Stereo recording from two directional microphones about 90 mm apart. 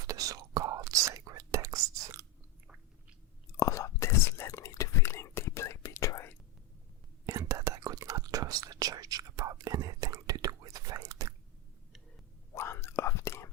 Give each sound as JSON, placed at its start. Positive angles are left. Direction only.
{"t": 0.0, "sound": "whispering", "side_deg": -40}
{"t": 3.6, "sound": "whispering", "side_deg": 35}
{"t": 7.3, "sound": "whispering", "side_deg": -35}
{"t": 12.5, "sound": "whispering", "side_deg": 30}